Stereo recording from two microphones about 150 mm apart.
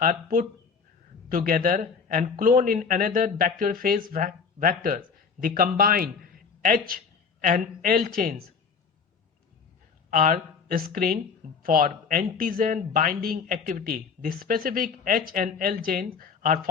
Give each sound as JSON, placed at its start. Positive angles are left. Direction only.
{"t": 0.0, "sound": "speech", "side_deg": -70}
{"t": 10.1, "sound": "speech", "side_deg": -65}